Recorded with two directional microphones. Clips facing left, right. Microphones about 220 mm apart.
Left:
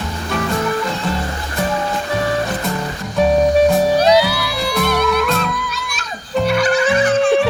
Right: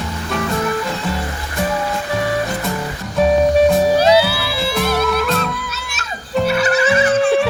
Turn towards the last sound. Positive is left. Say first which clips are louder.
# even
turn(degrees=-5)  # may be behind; listen again after turning